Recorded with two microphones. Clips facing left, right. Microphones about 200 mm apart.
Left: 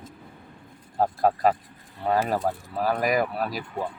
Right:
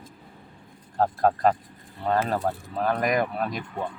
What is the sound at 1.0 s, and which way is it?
A man's voice, 5° left (ahead or behind).